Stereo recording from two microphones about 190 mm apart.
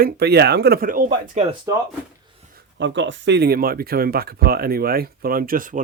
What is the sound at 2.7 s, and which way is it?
Speech, 75° right (ahead or behind).